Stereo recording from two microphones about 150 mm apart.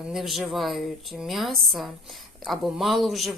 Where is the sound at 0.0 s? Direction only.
Centre (ahead or behind).